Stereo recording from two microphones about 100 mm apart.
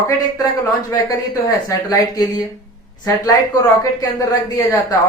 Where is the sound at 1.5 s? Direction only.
35° left (ahead or behind).